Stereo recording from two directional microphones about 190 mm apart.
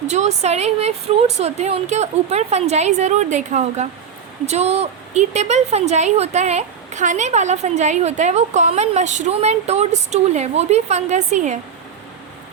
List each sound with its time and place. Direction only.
0.1 s a woman's voice: 35° right (ahead or behind)